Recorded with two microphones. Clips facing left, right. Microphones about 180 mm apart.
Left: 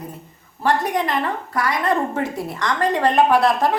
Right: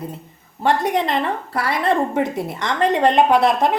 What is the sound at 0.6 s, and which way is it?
A woman's voice, 25° right (ahead or behind).